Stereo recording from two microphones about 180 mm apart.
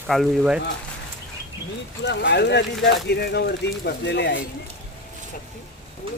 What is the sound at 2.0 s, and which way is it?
Speech, 70° left (ahead or behind).